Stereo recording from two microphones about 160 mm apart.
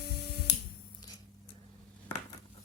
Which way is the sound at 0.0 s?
80° left.